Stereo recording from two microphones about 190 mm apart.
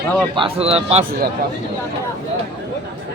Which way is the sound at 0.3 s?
30° right (ahead or behind).